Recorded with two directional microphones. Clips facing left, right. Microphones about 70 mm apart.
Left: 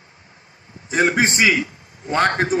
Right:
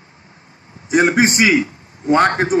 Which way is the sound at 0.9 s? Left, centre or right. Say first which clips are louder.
Right 4 dB; centre.